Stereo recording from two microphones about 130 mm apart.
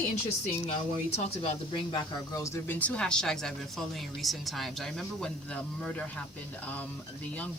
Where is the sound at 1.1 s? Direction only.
50° left (ahead or behind).